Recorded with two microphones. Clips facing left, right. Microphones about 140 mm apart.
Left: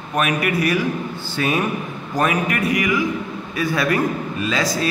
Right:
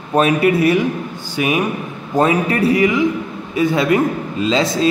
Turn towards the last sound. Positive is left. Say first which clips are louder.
# right 6 dB
turn(degrees=-25)  # may be behind; listen again after turning